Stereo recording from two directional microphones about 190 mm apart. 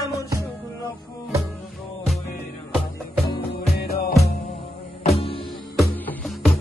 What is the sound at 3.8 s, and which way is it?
Music, 55° left (ahead or behind).